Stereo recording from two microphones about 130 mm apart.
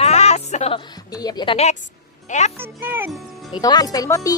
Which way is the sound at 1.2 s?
30° left (ahead or behind).